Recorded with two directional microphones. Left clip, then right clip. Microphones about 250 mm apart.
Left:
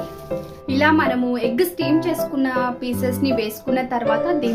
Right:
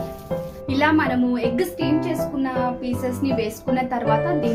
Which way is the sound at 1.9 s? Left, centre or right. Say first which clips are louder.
Left 4 dB; left.